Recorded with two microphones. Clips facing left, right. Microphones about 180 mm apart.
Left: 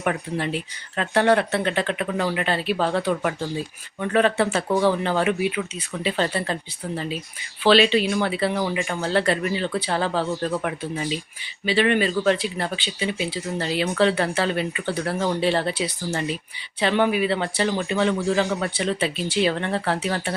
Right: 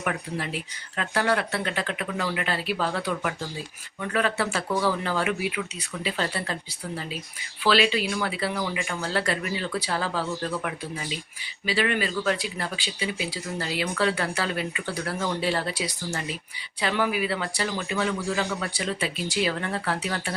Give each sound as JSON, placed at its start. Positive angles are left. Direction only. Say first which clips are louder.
{"t": 0.0, "sound": "speech", "louder": "left 5 dB", "side_deg": 30}